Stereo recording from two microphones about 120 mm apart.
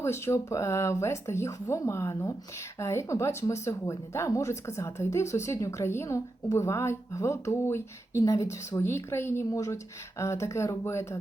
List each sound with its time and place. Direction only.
0.0 s speech: 20° left (ahead or behind)